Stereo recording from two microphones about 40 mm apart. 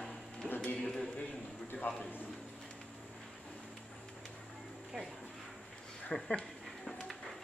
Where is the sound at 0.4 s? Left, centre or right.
Left.